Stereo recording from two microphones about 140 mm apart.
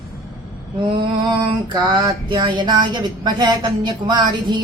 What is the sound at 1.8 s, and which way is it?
Speech, 35° right (ahead or behind).